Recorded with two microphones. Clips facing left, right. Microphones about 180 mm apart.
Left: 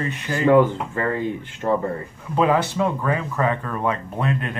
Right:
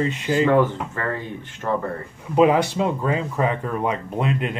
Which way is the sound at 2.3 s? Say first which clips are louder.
Right 3 dB; 20° right (ahead or behind).